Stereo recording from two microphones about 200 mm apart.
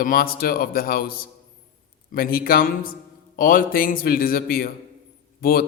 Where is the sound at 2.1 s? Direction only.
45° left (ahead or behind).